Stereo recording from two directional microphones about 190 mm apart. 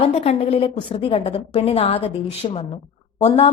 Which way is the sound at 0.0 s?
30° left (ahead or behind).